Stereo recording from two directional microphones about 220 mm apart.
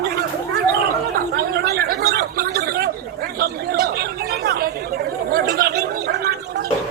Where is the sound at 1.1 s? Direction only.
45° right (ahead or behind).